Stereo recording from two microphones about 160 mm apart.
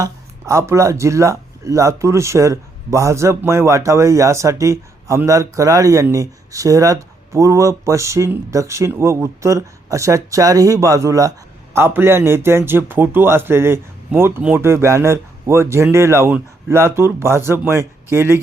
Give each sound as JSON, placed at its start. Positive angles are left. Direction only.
{"t": 0.0, "sound": "speech", "side_deg": -20}